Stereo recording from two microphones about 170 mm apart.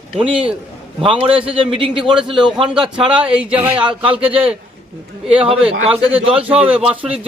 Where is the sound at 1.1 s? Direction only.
30° right (ahead or behind).